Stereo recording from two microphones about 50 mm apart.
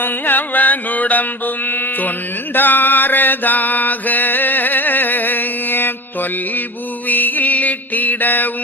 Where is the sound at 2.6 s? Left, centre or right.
Left.